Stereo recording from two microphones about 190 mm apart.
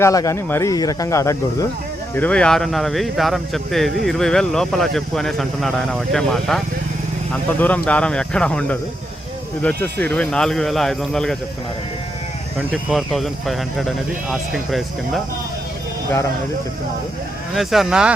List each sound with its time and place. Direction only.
0.0 s speech: 15° left (ahead or behind); by 6.6 s centre (ahead or behind)
7.6 s speech: 5° left (ahead or behind)
12.5 s speech: centre (ahead or behind)
17.5 s speech: centre (ahead or behind)